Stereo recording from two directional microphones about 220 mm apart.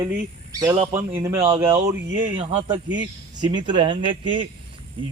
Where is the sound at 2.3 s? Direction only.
25° right (ahead or behind).